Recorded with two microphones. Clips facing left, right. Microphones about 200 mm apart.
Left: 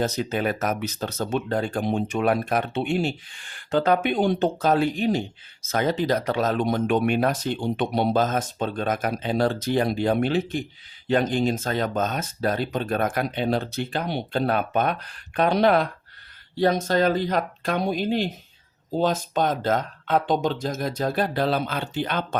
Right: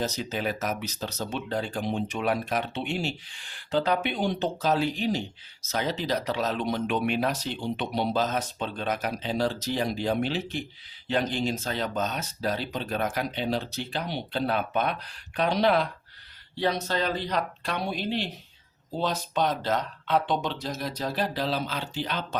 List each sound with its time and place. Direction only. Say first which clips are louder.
0.0 s speech: left 5 dB; 55° left (ahead or behind)